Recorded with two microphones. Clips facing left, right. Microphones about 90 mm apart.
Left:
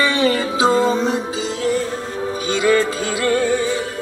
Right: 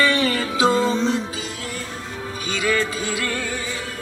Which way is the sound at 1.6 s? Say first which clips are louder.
Left 11 dB; 25° left (ahead or behind).